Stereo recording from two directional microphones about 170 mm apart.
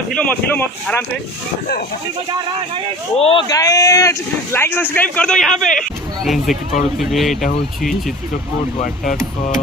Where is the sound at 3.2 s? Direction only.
35° left (ahead or behind).